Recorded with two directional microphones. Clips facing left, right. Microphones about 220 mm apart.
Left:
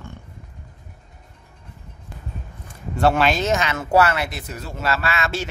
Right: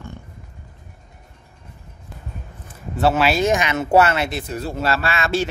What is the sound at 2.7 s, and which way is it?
Speech, 5° right (ahead or behind).